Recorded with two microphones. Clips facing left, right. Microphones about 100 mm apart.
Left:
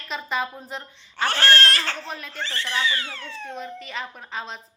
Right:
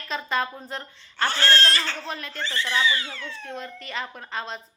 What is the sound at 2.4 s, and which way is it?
Speech, 60° left (ahead or behind).